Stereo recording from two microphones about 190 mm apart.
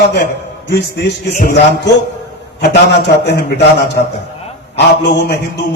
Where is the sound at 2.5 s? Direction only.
65° left (ahead or behind).